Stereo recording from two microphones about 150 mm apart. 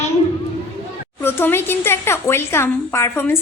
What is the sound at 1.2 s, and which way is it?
A woman's voice, 15° left (ahead or behind).